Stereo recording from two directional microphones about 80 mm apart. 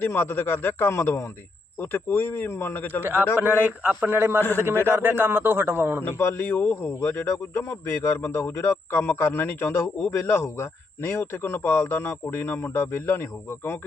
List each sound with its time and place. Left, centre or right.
0.0 s a man's voice: left
3.0 s a man's voice: right
4.4 s a man's voice: left
4.9 s a man's voice: right
6.0 s a man's voice: left